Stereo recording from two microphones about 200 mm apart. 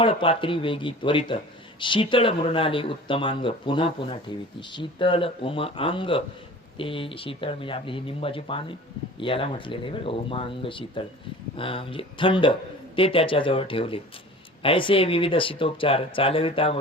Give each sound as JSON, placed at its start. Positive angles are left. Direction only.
{"t": 0.0, "sound": "speech", "side_deg": 25}